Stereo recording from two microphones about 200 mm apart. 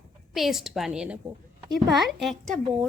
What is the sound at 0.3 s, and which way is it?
A woman's voice, centre (ahead or behind).